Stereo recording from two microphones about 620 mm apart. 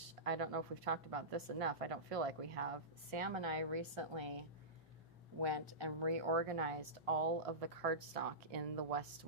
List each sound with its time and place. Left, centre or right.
0.3 s a woman's voice: right